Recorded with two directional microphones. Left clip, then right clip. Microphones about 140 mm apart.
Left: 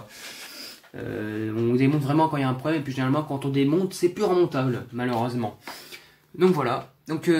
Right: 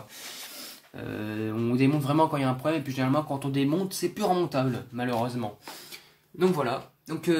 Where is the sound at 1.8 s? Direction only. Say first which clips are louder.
Left 1 dB; 35° right (ahead or behind).